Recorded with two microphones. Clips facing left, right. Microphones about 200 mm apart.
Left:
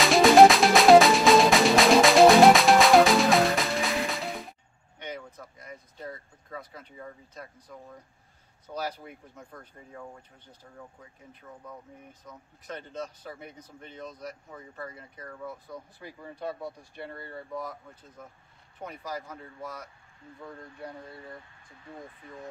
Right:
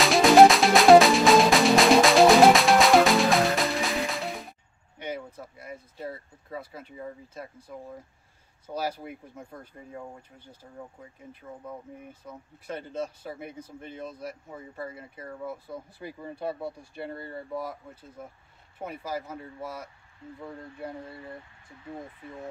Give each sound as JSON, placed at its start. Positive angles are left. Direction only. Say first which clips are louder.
{"t": 0.0, "sound": "music", "louder": "even", "side_deg": 0}
{"t": 6.6, "sound": "speech", "louder": "right 4 dB", "side_deg": -5}
{"t": 8.7, "sound": "speech", "louder": "right 3 dB", "side_deg": -10}
{"t": 9.4, "sound": "speech", "louder": "right 4 dB", "side_deg": -25}
{"t": 10.4, "sound": "speech", "louder": "right 3 dB", "side_deg": -10}
{"t": 11.5, "sound": "speech", "louder": "right 4 dB", "side_deg": -25}
{"t": 12.1, "sound": "speech", "louder": "right 5 dB", "side_deg": -10}
{"t": 14.5, "sound": "speech", "louder": "right 3 dB", "side_deg": -25}
{"t": 15.4, "sound": "speech", "louder": "right 3 dB", "side_deg": -5}